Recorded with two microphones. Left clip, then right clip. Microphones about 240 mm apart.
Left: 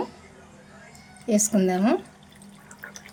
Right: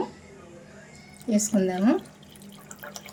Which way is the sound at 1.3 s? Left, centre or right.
Left.